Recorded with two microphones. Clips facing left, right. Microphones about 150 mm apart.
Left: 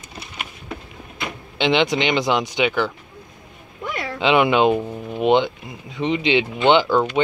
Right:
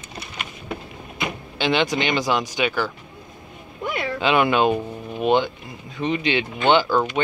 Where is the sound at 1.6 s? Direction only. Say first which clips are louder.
Left 3 dB; 20° left (ahead or behind).